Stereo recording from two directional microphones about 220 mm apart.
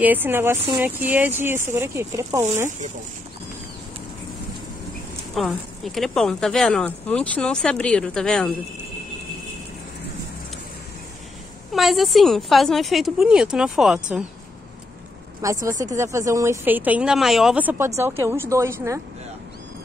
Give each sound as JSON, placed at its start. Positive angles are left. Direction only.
{"t": 0.0, "sound": "speech", "side_deg": -10}
{"t": 5.3, "sound": "speech", "side_deg": 0}
{"t": 11.7, "sound": "speech", "side_deg": 0}
{"t": 15.4, "sound": "speech", "side_deg": -15}
{"t": 15.7, "sound": "speech", "side_deg": -35}
{"t": 16.0, "sound": "speech", "side_deg": -15}